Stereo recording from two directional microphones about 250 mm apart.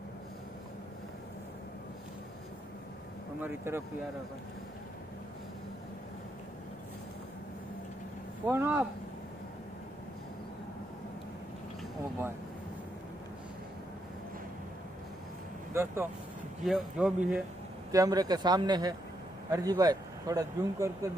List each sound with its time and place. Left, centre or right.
3.4 s speech: centre
8.5 s speech: centre
15.7 s speech: centre
17.9 s speech: centre